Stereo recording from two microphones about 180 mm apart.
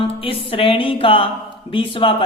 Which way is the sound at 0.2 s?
30° left (ahead or behind).